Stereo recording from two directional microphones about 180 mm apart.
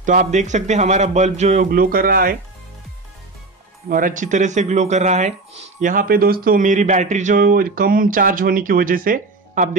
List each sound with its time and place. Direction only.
0.0 s a man's voice: 45° right (ahead or behind)
1.7 s speech: 55° right (ahead or behind)
3.9 s speech: 45° right (ahead or behind)